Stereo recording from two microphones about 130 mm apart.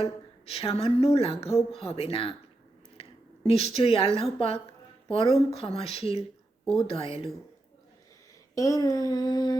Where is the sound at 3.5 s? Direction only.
50° left (ahead or behind).